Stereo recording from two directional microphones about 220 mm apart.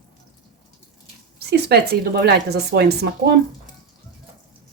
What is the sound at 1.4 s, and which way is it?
Speech, 45° right (ahead or behind).